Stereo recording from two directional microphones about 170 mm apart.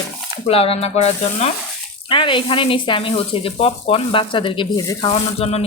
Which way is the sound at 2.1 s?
30° left (ahead or behind).